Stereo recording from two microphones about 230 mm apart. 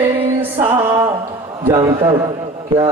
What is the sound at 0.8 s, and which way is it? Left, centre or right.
Music, centre.